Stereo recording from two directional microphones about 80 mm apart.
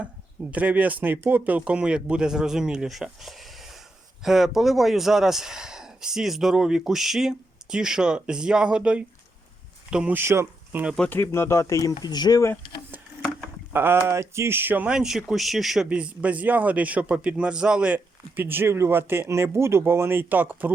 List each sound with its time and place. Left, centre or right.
0.5 s speech: centre
10.1 s speech: right
11.1 s speech: left
13.7 s a man's voice: right
14.8 s a man's voice: centre; by 20.7 s right